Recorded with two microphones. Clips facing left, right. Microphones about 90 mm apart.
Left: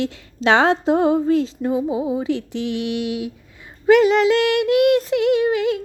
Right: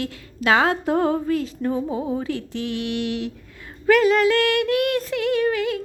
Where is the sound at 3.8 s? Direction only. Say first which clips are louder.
Left 3 dB; 20° left (ahead or behind).